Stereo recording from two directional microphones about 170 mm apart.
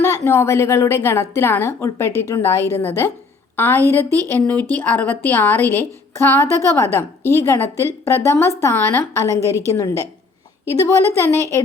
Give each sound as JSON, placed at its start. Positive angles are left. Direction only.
{"t": 0.0, "sound": "a woman's voice", "side_deg": 15}